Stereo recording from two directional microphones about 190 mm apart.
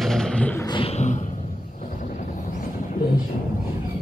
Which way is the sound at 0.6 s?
25° left (ahead or behind).